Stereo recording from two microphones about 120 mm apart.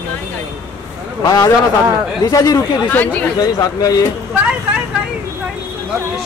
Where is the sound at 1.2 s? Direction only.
30° left (ahead or behind).